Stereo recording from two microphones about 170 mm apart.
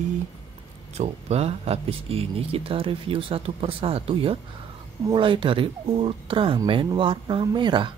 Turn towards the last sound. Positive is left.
turn(degrees=-25)  # may be behind; listen again after turning